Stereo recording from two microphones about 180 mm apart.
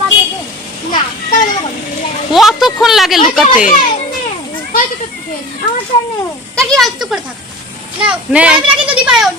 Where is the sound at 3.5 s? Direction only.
45° left (ahead or behind).